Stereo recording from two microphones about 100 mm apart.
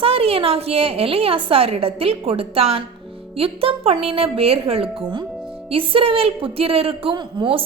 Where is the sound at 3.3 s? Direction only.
70° right (ahead or behind).